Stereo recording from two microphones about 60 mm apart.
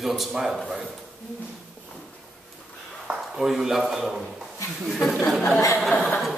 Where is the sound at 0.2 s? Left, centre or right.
Centre.